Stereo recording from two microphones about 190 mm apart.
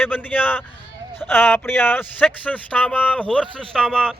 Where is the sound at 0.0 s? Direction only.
10° left (ahead or behind).